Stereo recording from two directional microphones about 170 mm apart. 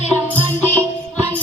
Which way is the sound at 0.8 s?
15° right (ahead or behind).